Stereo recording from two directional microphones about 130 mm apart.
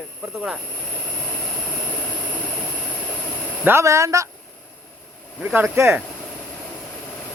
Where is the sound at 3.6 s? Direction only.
20° right (ahead or behind).